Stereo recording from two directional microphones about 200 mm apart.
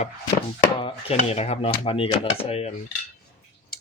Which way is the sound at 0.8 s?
25° left (ahead or behind).